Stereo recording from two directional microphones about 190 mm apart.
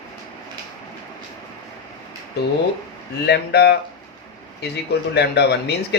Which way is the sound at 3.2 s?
60° left (ahead or behind).